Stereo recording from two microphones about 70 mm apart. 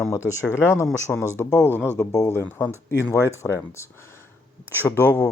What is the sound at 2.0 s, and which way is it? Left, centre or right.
Speech, left.